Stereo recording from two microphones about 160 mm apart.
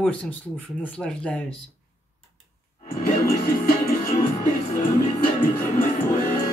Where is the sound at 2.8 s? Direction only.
60° left (ahead or behind).